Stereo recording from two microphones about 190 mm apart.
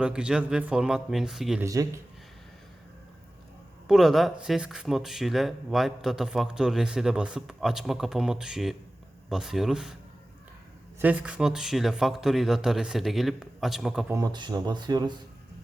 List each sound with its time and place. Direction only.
0.0 s speech: 5° right (ahead or behind)
1.6 s speech: 15° right (ahead or behind)
3.8 s speech: centre (ahead or behind)
11.0 s speech: 5° right (ahead or behind)
14.1 s speech: 20° right (ahead or behind)